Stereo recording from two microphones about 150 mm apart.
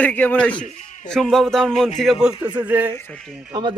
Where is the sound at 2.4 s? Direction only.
30° right (ahead or behind).